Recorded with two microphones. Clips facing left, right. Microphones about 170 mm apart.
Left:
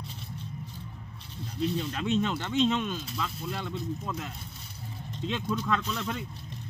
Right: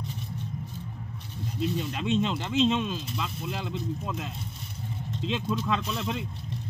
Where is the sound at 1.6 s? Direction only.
15° right (ahead or behind).